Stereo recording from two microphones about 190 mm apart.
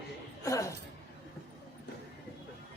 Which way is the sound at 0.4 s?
15° left (ahead or behind).